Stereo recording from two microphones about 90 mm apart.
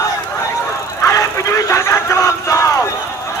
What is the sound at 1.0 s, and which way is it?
Crowd, 35° left (ahead or behind).